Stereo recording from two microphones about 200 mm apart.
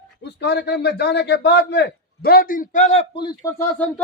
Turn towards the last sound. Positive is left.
turn(degrees=10)  # may be behind; listen again after turning